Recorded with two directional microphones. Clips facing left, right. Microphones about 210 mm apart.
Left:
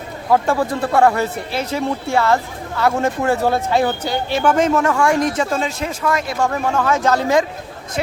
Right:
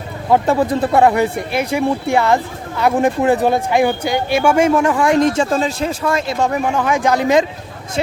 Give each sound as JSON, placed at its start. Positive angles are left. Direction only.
{"t": 0.3, "sound": "speech", "side_deg": -20}
{"t": 8.0, "sound": "speech", "side_deg": -25}